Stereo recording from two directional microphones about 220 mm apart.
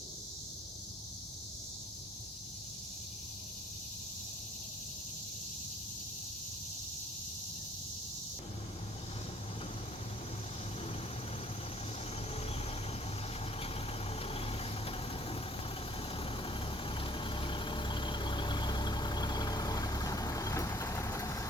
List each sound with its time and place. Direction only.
14.2 s vehicle: 25° left (ahead or behind)